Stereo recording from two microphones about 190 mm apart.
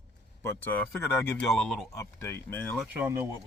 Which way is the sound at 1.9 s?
15° left (ahead or behind).